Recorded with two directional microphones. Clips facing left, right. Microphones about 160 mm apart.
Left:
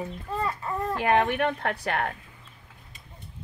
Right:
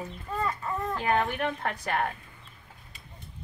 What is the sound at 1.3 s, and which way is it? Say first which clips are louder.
Speech: left 4 dB; 60° left (ahead or behind).